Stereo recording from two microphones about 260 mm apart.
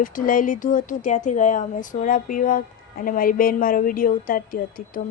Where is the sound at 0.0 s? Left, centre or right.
Left.